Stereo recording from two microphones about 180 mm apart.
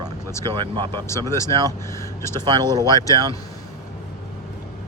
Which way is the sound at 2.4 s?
20° right (ahead or behind).